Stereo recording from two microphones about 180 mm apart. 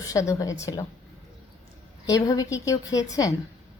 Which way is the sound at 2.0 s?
20° left (ahead or behind).